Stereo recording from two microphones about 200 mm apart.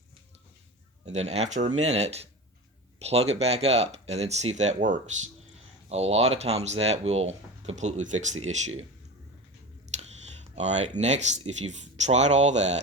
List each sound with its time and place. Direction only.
1.0 s speech: 35° right (ahead or behind)
10.0 s speech: 35° right (ahead or behind)